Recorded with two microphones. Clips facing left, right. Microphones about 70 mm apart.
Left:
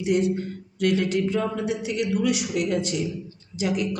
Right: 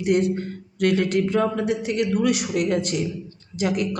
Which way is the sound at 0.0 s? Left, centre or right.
Right.